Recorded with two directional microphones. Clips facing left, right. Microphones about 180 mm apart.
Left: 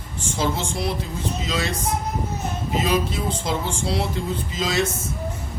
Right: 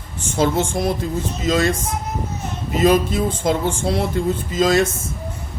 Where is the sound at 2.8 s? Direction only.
50° right (ahead or behind).